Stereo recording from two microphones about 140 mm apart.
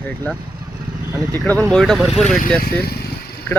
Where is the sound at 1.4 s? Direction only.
5° left (ahead or behind).